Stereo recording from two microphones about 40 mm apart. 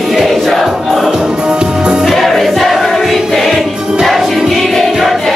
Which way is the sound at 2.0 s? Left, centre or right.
Centre.